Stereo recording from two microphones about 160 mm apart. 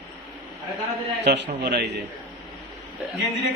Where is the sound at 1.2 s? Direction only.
90° right.